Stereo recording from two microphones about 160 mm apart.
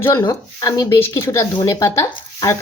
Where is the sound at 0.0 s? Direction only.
20° left (ahead or behind).